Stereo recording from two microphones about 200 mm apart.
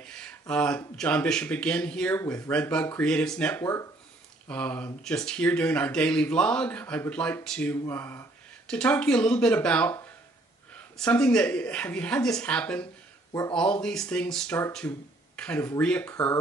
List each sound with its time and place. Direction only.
0.0 s speech: 5° left (ahead or behind)
13.3 s speech: 15° left (ahead or behind)
13.6 s speech: 5° left (ahead or behind)